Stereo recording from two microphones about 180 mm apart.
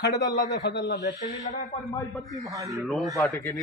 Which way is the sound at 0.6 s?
70° left (ahead or behind).